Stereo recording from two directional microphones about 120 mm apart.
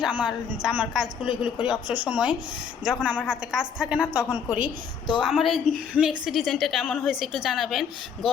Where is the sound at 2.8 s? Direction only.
90° right.